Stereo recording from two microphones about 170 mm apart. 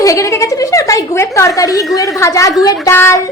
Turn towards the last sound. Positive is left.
turn(degrees=15)  # may be behind; listen again after turning